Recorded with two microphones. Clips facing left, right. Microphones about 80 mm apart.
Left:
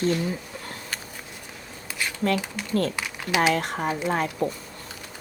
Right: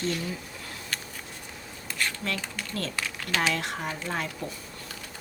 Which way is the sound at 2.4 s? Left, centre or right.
Centre.